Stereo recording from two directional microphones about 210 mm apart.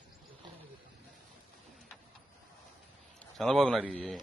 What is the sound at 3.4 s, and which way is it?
Speech, 5° left (ahead or behind).